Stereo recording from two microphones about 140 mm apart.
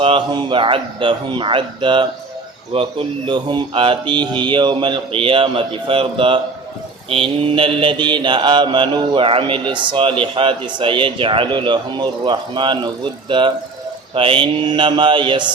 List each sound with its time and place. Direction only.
0.0 s mantra: 35° right (ahead or behind)